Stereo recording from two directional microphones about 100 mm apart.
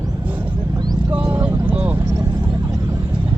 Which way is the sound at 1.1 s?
15° right (ahead or behind).